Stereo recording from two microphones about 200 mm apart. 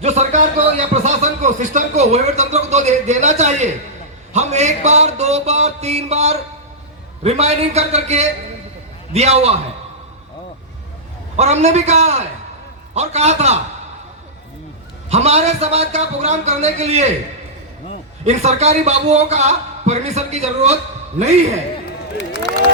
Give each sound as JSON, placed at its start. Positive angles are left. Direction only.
{"t": 0.0, "sound": "a sound", "side_deg": -35}
{"t": 4.3, "sound": "a man's voice", "side_deg": -35}
{"t": 11.3, "sound": "a man's voice", "side_deg": -35}
{"t": 15.1, "sound": "a man's voice", "side_deg": -35}
{"t": 18.3, "sound": "a man's voice", "side_deg": -35}